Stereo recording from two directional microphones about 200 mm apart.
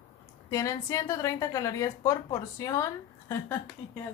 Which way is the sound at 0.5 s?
15° left (ahead or behind).